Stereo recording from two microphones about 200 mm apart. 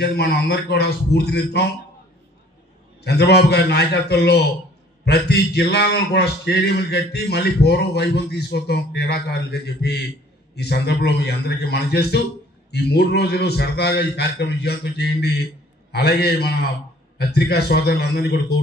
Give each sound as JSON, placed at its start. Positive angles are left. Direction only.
{"t": 0.0, "sound": "a man's voice", "side_deg": 55}
{"t": 3.0, "sound": "a man's voice", "side_deg": 55}